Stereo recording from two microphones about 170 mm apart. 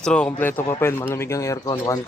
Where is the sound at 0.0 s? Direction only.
5° left (ahead or behind).